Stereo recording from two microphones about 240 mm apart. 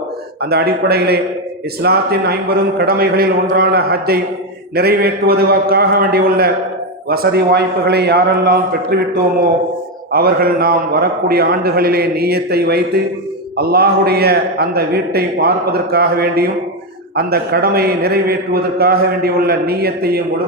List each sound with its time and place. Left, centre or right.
0.5 s a man's voice: right